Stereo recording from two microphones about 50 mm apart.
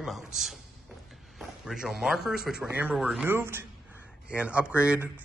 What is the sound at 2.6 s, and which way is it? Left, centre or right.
Speech, right.